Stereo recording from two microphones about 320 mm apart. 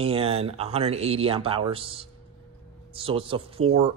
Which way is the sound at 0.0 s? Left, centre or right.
Centre.